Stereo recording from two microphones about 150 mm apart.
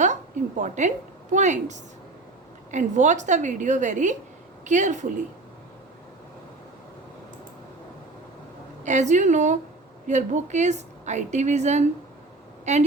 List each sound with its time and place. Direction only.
0.0 s a woman's voice: 55° right (ahead or behind)
8.8 s a woman's voice: 55° right (ahead or behind)